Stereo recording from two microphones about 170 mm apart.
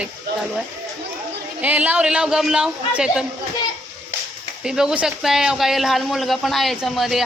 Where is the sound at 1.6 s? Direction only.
10° right (ahead or behind).